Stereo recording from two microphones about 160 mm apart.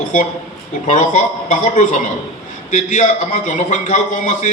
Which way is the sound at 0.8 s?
50° left (ahead or behind).